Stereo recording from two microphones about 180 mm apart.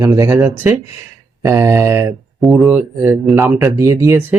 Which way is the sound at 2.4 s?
Centre (ahead or behind).